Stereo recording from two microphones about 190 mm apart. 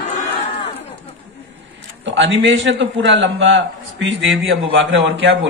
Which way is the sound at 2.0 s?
75° right (ahead or behind).